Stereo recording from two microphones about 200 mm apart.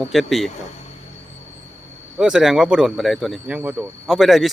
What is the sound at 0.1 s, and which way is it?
Speech, centre (ahead or behind).